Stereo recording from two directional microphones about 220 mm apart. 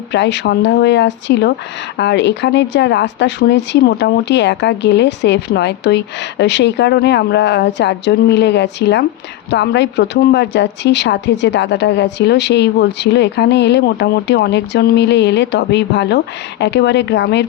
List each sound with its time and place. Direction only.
0.1 s a woman's voice: 50° left (ahead or behind)